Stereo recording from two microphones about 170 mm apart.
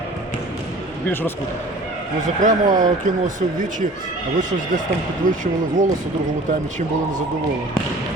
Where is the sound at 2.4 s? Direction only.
50° right (ahead or behind).